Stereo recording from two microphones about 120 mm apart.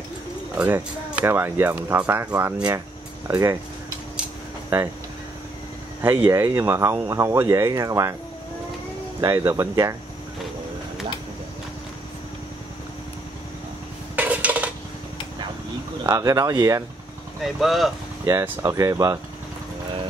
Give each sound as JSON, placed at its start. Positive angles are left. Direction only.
{"t": 0.6, "sound": "speech", "side_deg": -20}
{"t": 6.0, "sound": "speech", "side_deg": -20}
{"t": 9.2, "sound": "speech", "side_deg": -20}
{"t": 14.1, "sound": "dishes", "side_deg": -10}
{"t": 16.1, "sound": "speech", "side_deg": -30}
{"t": 17.4, "sound": "speech", "side_deg": 0}
{"t": 18.2, "sound": "speech", "side_deg": -25}